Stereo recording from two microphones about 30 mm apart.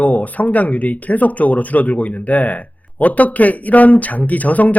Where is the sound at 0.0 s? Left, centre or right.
Left.